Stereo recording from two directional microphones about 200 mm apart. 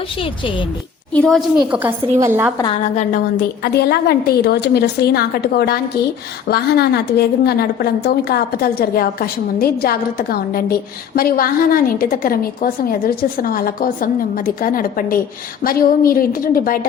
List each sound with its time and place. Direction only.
1.1 s a woman's voice: centre (ahead or behind); by 2.5 s 15° right (ahead or behind)
2.9 s a woman's voice: 35° left (ahead or behind)
3.6 s a woman's voice: 50° left (ahead or behind)